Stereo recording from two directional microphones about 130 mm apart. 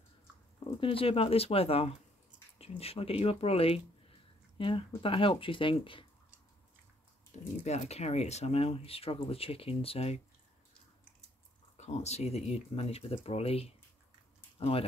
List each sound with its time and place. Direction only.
0.7 s speech: 45° left (ahead or behind)
7.6 s speech: 60° left (ahead or behind)
11.7 s speech: 60° left (ahead or behind)